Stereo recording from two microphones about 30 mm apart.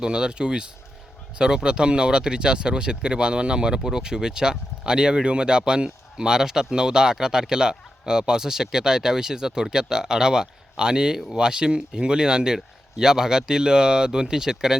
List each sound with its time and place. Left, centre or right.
0.0 s speech: right
3.8 s speech: right